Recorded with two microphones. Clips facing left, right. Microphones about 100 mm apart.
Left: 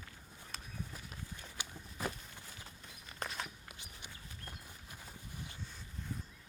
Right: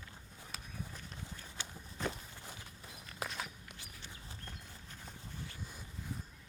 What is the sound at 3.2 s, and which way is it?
Walk, centre (ahead or behind).